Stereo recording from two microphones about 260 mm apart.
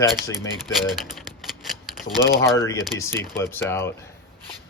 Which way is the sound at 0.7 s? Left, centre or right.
Centre.